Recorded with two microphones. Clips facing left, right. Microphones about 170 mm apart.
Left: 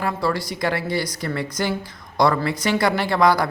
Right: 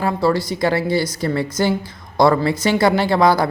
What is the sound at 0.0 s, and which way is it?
Speech, 30° right (ahead or behind).